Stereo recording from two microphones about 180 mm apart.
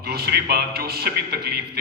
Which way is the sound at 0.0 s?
60° right (ahead or behind).